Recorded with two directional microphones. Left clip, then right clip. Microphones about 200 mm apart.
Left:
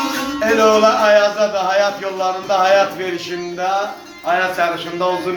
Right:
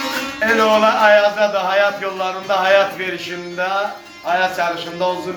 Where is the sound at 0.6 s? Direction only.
10° left (ahead or behind).